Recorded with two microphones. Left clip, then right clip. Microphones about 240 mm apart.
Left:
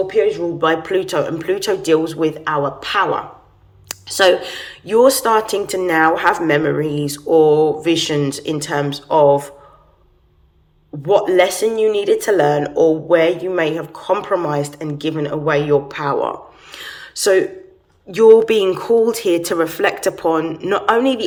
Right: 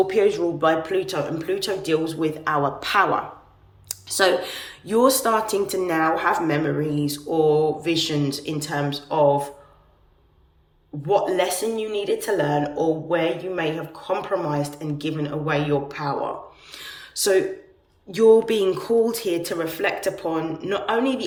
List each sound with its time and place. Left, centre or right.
0.1 s speech: centre
11.0 s speech: centre
16.7 s a sound: centre
18.1 s speech: centre